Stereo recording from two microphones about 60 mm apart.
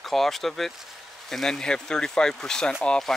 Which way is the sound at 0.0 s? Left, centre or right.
Centre.